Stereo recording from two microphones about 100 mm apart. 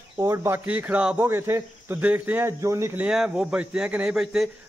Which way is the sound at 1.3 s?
25° right (ahead or behind).